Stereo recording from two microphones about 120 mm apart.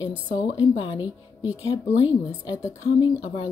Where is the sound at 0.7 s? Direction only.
40° left (ahead or behind).